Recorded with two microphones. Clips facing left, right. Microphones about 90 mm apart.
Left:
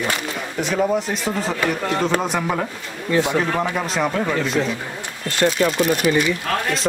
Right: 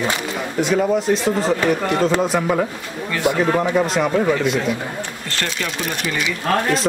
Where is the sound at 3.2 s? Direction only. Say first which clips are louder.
Right 3 dB; 15° right (ahead or behind).